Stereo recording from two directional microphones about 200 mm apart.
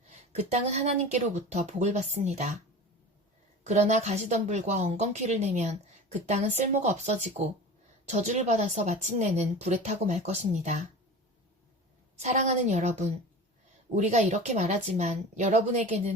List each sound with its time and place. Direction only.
0.1 s speech: 35° right (ahead or behind)
3.7 s speech: 35° right (ahead or behind)
12.2 s speech: 35° right (ahead or behind)